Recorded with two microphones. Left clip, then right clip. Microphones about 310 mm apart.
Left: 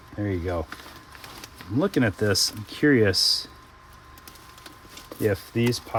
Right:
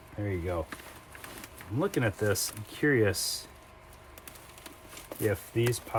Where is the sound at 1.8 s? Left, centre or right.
Left.